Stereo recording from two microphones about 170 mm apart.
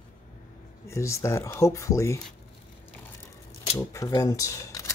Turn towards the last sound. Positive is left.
turn(degrees=20)  # may be behind; listen again after turning